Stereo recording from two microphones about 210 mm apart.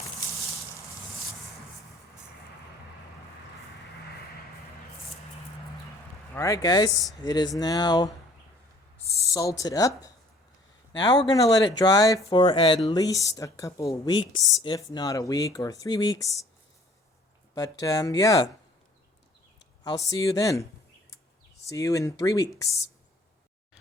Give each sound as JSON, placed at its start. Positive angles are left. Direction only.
{"t": 6.3, "sound": "speech", "side_deg": 15}
{"t": 9.3, "sound": "speech", "side_deg": 15}
{"t": 17.5, "sound": "speech", "side_deg": 15}
{"t": 19.8, "sound": "speech", "side_deg": 15}
{"t": 21.7, "sound": "speech", "side_deg": 15}